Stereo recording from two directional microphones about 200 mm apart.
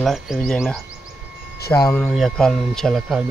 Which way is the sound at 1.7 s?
15° left (ahead or behind).